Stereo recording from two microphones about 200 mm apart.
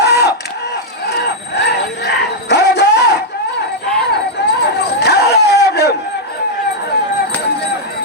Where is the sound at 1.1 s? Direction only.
55° left (ahead or behind).